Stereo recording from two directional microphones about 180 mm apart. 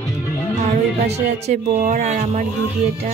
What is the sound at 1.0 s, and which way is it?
Speech, 40° right (ahead or behind).